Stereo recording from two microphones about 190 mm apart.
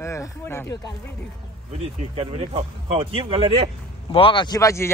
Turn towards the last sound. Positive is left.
turn(degrees=15)  # may be behind; listen again after turning